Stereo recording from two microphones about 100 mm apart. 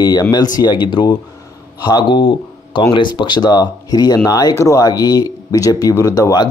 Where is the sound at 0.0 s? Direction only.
45° left (ahead or behind).